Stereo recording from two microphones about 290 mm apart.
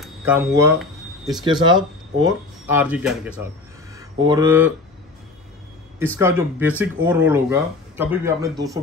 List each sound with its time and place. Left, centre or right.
0.0 s a sound: centre
1.4 s speech: centre
6.1 s speech: centre